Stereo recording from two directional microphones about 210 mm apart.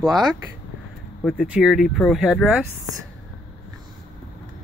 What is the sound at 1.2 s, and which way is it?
Speech, 5° left (ahead or behind).